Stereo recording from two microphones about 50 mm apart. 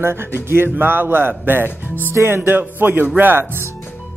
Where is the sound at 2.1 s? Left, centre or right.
Right.